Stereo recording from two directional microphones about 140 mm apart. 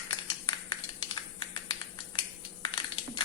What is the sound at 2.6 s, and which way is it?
Crushing, 40° left (ahead or behind).